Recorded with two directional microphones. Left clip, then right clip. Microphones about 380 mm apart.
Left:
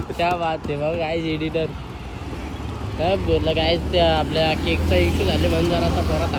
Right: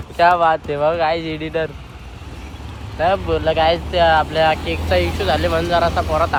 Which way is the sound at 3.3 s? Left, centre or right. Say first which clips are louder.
Right 4 dB; centre.